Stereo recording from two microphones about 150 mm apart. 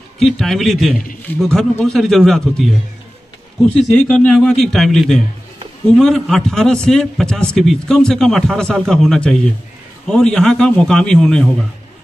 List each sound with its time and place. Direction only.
0.2 s a man's voice: centre (ahead or behind)